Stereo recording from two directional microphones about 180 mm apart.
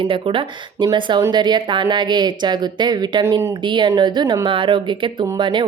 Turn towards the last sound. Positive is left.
turn(degrees=-25)  # may be behind; listen again after turning